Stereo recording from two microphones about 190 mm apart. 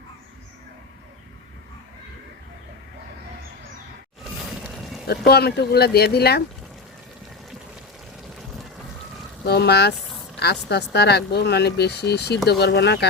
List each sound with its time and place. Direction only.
5.0 s speech: 55° left (ahead or behind)
9.5 s speech: 60° left (ahead or behind)